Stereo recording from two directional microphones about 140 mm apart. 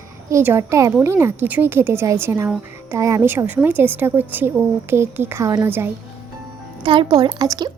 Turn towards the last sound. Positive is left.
turn(degrees=-30)  # may be behind; listen again after turning